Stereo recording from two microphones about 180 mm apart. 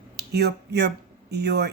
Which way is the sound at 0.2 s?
65° right (ahead or behind).